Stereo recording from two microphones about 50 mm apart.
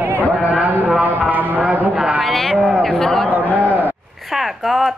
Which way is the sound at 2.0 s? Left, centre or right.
Centre.